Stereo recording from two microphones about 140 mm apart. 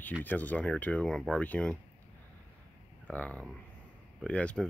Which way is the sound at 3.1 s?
10° left (ahead or behind).